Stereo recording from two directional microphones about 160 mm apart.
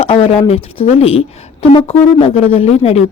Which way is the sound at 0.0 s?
40° left (ahead or behind).